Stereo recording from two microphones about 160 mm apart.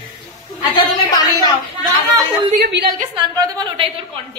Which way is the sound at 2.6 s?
90° right.